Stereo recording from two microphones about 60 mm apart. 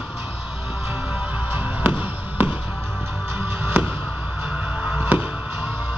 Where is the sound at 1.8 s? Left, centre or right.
Right.